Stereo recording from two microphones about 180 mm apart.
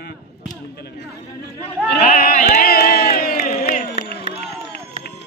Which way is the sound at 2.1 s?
50° left (ahead or behind).